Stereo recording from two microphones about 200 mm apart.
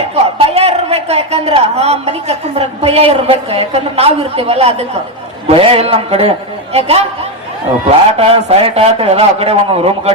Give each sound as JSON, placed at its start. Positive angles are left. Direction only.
{"t": 0.3, "sound": "a man's voice", "side_deg": -30}